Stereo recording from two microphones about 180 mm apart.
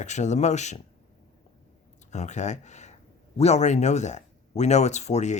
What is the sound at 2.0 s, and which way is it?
Speech, 40° left (ahead or behind).